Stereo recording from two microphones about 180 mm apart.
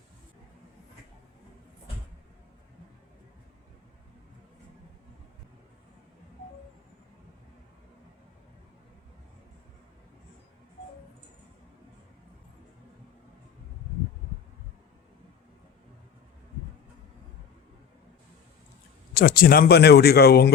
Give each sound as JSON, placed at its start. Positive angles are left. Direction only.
{"t": 19.1, "sound": "speech", "side_deg": 55}